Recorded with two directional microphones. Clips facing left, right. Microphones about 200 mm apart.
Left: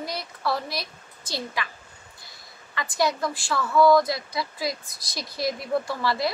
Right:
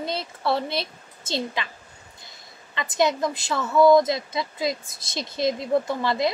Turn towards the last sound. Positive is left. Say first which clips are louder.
# right 3 dB
turn(degrees=-20)  # may be behind; listen again after turning